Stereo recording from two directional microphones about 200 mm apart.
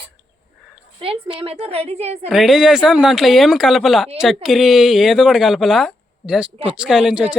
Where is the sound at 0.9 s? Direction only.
25° right (ahead or behind).